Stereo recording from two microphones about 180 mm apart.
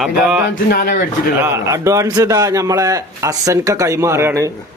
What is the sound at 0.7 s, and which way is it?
Speech, 50° left (ahead or behind).